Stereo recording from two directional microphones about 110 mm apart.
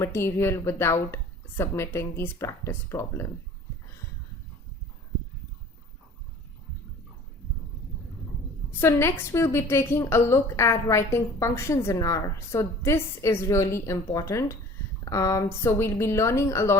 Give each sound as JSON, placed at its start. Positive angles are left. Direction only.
{"t": 0.0, "sound": "a woman's voice", "side_deg": 25}
{"t": 8.8, "sound": "a woman's voice", "side_deg": 25}